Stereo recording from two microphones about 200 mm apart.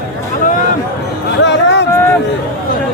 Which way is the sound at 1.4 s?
60° left (ahead or behind).